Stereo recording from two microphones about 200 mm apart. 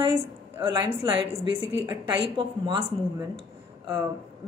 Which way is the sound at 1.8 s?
25° right (ahead or behind).